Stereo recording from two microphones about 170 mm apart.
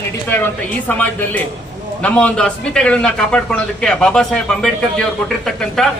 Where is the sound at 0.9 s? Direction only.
10° left (ahead or behind).